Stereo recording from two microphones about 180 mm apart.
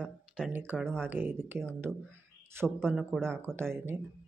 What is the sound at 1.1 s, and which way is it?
Speech, 10° right (ahead or behind).